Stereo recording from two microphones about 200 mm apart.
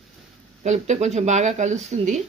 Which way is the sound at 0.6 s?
35° right (ahead or behind).